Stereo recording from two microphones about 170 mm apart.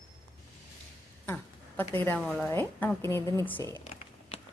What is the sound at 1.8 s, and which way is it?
Speech, 10° left (ahead or behind).